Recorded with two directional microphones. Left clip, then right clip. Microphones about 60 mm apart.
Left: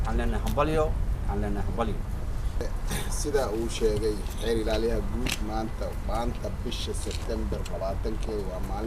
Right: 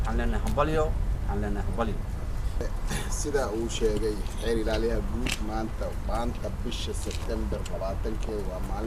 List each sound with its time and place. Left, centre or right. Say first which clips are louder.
0.2 s speech: even; left
5.2 s speech: even; centre